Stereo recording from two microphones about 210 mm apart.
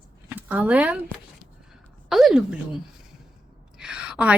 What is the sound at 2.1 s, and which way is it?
Speech, centre (ahead or behind).